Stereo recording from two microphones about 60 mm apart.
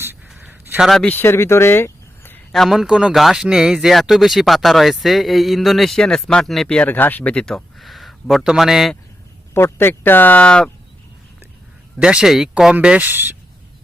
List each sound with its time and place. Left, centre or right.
0.3 s a sound: right
1.2 s speech: left
2.5 s a man's voice: centre
6.8 s speech: left
7.4 s a sound: centre
8.4 s a man's voice: centre
9.6 s speech: left
10.4 s speech: centre
11.9 s a man's voice: centre
12.8 s speech: centre
13.1 s speech: right